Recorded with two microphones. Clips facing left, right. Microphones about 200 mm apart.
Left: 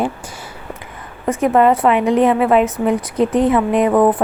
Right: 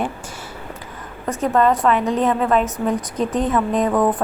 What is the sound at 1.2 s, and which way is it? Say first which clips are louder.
A woman's voice: left 4 dB; 10° left (ahead or behind).